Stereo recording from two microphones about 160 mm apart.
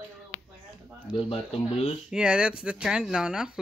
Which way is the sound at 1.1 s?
35° left (ahead or behind).